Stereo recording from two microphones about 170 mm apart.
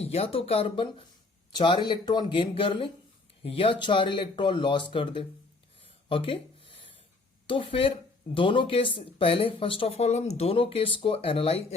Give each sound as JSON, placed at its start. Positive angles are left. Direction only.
{"t": 0.0, "sound": "speech", "side_deg": 35}
{"t": 6.1, "sound": "a sound", "side_deg": 30}
{"t": 7.4, "sound": "speech", "side_deg": 30}